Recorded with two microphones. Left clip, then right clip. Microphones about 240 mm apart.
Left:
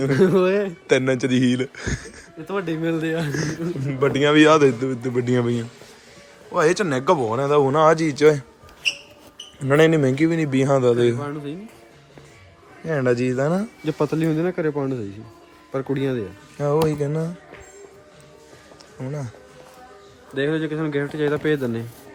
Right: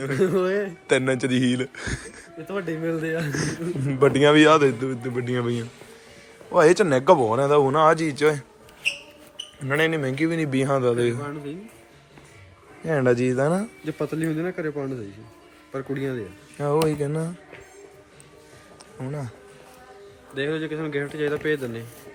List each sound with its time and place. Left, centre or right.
0.1 s speech: left
0.9 s a man's voice: centre
2.5 s speech: left
3.3 s a man's voice: centre
6.5 s a man's voice: centre
9.6 s a man's voice: left
11.2 s speech: left
12.8 s speech: centre
13.8 s speech: left
16.6 s a man's voice: centre
18.9 s a man's voice: centre
20.3 s speech: left